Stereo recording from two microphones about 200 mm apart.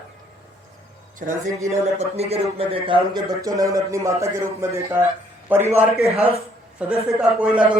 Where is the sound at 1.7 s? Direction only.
30° right (ahead or behind); by 5.6 s 10° right (ahead or behind).